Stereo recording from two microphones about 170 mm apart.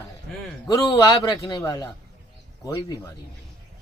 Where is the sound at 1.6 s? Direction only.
20° left (ahead or behind).